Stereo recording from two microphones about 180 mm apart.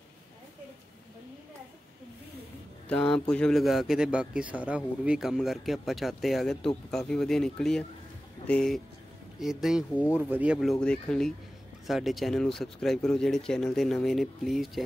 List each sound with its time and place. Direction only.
2.9 s a man's voice: 5° left (ahead or behind)